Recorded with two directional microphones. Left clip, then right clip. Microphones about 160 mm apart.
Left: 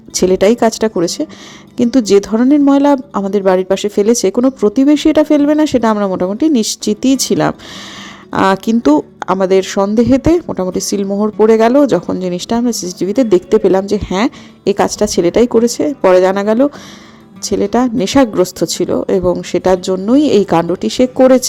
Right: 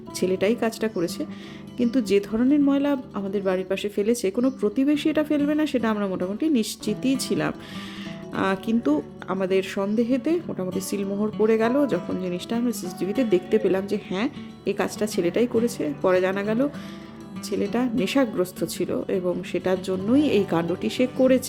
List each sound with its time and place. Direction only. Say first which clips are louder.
0.1 s speech: left 13 dB; 45° left (ahead or behind)